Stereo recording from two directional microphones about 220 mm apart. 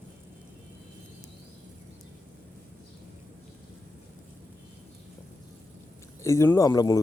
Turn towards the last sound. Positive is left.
turn(degrees=15)  # may be behind; listen again after turning